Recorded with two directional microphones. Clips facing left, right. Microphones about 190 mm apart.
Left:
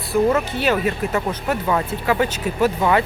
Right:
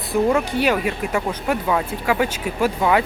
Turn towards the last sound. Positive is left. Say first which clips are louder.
# left 1 dB
turn(degrees=-5)  # may be behind; listen again after turning